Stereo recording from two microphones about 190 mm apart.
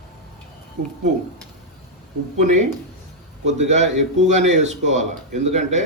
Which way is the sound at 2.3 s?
35° right (ahead or behind).